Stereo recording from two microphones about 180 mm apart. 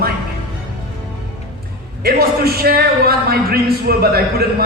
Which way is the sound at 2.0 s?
60° right (ahead or behind).